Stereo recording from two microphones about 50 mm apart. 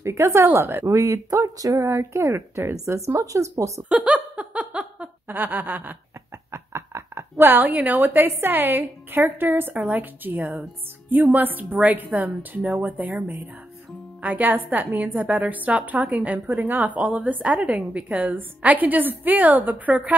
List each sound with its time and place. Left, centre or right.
0.0 s a woman's voice: right
0.8 s a woman's voice: right
1.9 s a woman's voice: right
3.9 s laughter: right
5.3 s a woman's voice: right
6.5 s a sound: right
7.5 s a woman's voice: right
17.6 s a woman's voice: centre
17.9 s a woman's voice: right